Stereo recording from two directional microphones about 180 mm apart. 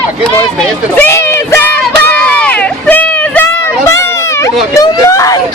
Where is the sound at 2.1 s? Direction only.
5° left (ahead or behind).